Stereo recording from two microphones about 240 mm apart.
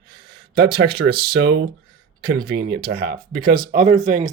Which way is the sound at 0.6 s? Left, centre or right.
Right.